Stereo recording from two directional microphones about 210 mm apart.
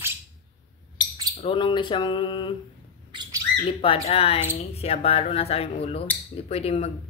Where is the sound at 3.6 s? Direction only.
25° left (ahead or behind).